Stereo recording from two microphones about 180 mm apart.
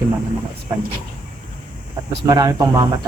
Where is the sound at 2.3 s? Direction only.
20° right (ahead or behind).